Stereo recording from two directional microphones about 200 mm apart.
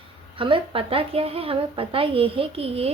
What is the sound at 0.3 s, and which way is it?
A woman's voice, 25° right (ahead or behind).